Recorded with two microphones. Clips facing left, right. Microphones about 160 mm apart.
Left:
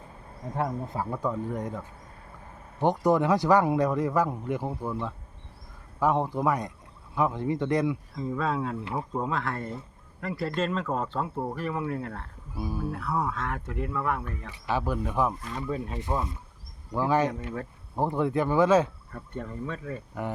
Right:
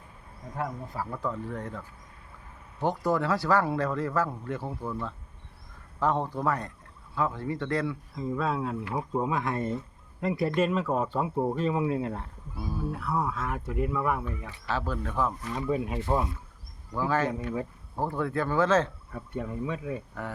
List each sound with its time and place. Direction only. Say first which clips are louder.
0.5 s speech: left 4 dB; 25° left (ahead or behind)
2.8 s speech: left 4 dB; 20° left (ahead or behind)
6.0 s speech: left 2 dB; 10° left (ahead or behind)
8.1 s speech: left 1 dB; centre (ahead or behind); by 12.3 s 20° right (ahead or behind)
12.5 s speech: left 2 dB; 10° left (ahead or behind)
12.9 s speech: right 1 dB; centre (ahead or behind)
14.7 s speech: left 3 dB; 15° left (ahead or behind)
15.4 s speech: right 3 dB; 10° right (ahead or behind)
16.9 s speech: left 3 dB; 15° left (ahead or behind)
19.1 s speech: right 3 dB; 10° right (ahead or behind)